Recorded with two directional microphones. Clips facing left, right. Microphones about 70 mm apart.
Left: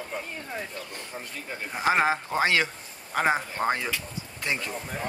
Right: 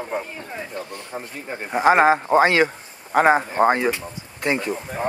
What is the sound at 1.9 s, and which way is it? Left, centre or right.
Speech, right.